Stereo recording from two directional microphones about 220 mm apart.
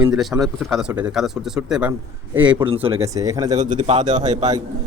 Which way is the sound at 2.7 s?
25° right (ahead or behind).